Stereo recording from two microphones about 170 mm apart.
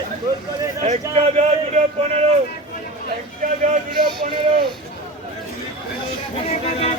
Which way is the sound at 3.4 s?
50° right (ahead or behind).